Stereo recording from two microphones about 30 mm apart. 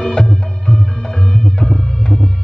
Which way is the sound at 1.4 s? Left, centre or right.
Left.